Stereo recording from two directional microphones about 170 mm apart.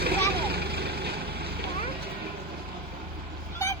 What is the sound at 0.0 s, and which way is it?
Vehicle, 70° right (ahead or behind).